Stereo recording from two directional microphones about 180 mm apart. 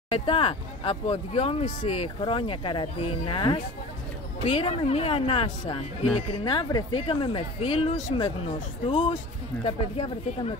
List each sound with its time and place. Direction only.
0.1 s speech: 30° left (ahead or behind)